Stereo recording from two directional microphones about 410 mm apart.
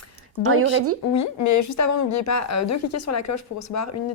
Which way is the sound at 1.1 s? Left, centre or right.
Left.